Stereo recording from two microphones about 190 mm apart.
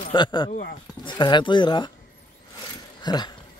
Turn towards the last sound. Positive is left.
turn(degrees=25)  # may be behind; listen again after turning